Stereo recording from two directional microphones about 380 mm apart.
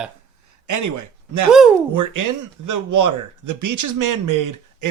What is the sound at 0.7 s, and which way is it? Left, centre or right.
A man's voice, right.